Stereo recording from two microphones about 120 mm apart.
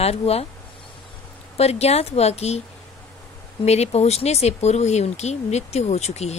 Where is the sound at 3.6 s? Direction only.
60° left (ahead or behind).